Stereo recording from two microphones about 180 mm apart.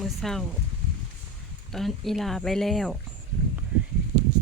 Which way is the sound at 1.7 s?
Centre (ahead or behind).